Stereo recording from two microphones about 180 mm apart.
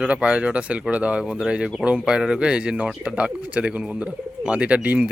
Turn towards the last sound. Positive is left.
turn(degrees=-10)  # may be behind; listen again after turning